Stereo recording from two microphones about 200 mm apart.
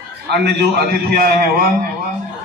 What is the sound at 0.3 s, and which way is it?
A man's voice, 55° right (ahead or behind).